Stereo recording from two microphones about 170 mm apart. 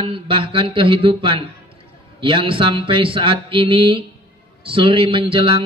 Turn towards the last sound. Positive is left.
turn(degrees=-30)  # may be behind; listen again after turning